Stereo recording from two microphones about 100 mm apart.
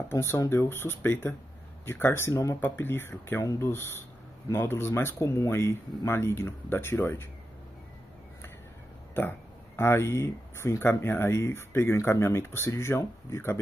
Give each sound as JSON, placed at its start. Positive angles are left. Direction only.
{"t": 0.1, "sound": "speech", "side_deg": 25}
{"t": 9.8, "sound": "speech", "side_deg": 25}